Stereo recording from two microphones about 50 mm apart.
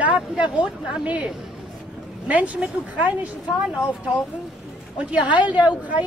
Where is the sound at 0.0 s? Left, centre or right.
Right.